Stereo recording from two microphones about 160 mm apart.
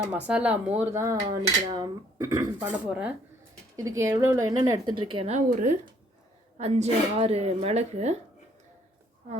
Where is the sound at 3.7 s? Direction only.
20° right (ahead or behind); by 8.1 s 45° right (ahead or behind).